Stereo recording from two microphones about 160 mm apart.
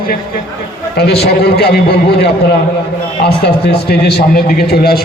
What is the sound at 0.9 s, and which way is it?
A man's voice, 85° left.